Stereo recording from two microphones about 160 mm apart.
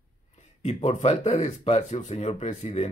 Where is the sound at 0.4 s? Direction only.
45° left (ahead or behind).